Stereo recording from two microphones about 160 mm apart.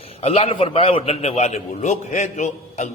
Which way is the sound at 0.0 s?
40° left (ahead or behind).